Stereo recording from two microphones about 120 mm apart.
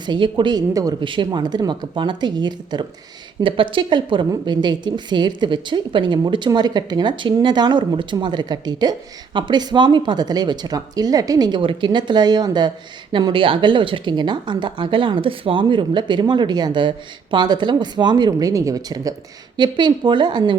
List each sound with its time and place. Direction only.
0.0 s speech: 40° right (ahead or behind)
1.0 s a woman's voice: 45° right (ahead or behind)